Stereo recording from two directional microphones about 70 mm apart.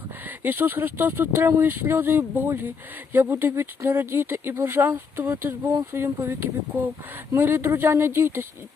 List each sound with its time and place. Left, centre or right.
0.3 s speech: right